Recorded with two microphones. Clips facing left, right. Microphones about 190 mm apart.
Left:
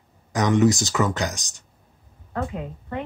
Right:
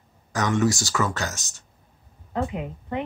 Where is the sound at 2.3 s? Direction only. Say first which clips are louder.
Right 1 dB; 20° right (ahead or behind).